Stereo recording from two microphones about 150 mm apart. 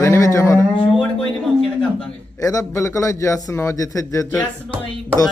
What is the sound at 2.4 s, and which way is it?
A man's voice, 20° left (ahead or behind).